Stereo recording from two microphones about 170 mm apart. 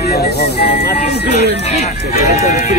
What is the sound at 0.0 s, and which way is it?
Speech, 70° left (ahead or behind).